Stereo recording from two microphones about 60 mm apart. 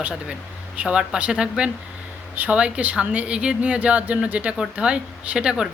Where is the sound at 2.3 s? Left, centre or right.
Right.